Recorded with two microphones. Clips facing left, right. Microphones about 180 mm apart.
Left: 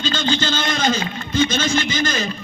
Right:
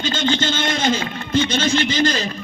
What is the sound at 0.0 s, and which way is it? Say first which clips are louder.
A man's voice: right 1 dB; 20° right (ahead or behind).